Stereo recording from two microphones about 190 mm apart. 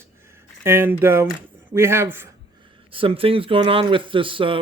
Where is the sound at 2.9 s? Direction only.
30° right (ahead or behind).